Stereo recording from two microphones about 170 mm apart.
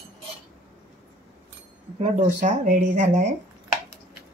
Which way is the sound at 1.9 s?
45° right (ahead or behind).